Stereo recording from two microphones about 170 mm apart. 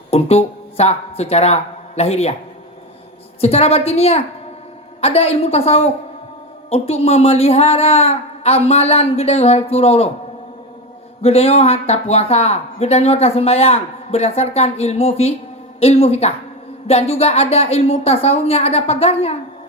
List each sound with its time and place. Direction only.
0.1 s speech: 40° left (ahead or behind)
3.4 s speech: 35° left (ahead or behind)
11.2 s speech: 35° left (ahead or behind)